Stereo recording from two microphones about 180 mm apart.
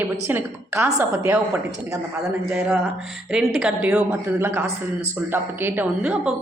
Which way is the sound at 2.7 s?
5° right (ahead or behind).